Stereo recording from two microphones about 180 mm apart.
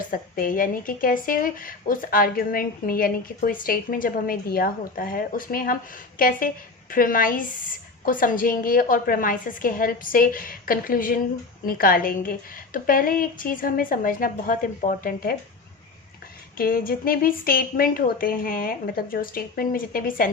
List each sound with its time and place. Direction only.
0.1 s a woman's voice: 50° left (ahead or behind)
16.6 s a woman's voice: 55° left (ahead or behind)